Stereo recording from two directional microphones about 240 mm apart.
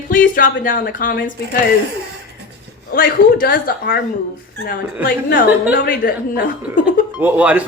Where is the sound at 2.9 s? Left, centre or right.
Left.